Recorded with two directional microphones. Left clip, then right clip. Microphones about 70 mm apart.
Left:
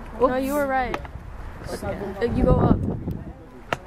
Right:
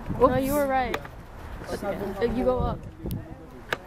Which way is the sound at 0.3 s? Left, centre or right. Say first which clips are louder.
Left 1 dB; left.